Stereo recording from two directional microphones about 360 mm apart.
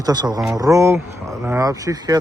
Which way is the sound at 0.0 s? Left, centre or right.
Centre.